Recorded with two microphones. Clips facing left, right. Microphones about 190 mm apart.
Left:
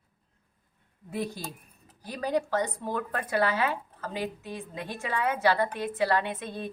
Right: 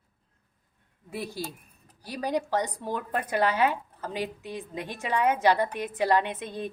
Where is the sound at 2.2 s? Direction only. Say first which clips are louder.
Even; 15° right (ahead or behind).